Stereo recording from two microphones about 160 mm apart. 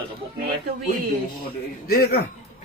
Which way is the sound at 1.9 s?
75° left (ahead or behind).